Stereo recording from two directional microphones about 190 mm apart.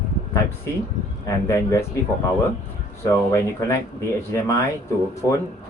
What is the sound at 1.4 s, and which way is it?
Speech, 15° left (ahead or behind).